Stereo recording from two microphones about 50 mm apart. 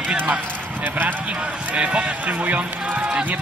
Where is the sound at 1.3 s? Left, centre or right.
Right.